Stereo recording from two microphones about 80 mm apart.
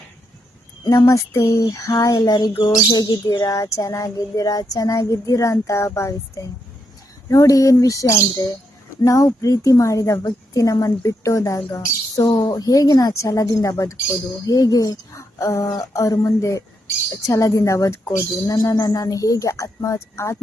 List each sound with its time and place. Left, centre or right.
0.9 s a woman's voice: left
18.4 s a woman's voice: left